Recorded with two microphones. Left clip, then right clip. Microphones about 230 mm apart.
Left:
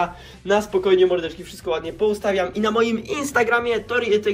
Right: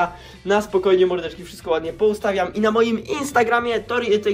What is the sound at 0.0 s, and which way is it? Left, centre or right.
A man's voice, centre.